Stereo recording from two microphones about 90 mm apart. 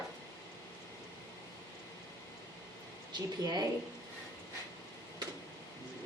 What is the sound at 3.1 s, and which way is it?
Speech, 50° right (ahead or behind).